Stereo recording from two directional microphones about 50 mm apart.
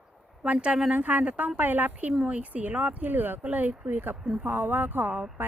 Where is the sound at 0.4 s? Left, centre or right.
Right.